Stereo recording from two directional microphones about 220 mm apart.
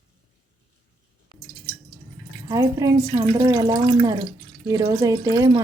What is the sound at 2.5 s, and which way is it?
Speech, 15° right (ahead or behind).